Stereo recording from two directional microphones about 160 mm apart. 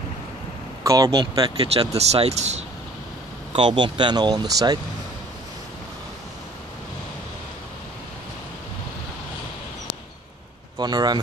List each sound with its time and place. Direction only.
0.8 s speech: 20° right (ahead or behind)
2.0 s speech: 40° right (ahead or behind)
3.5 s speech: 30° right (ahead or behind)
10.8 s speech: 25° right (ahead or behind)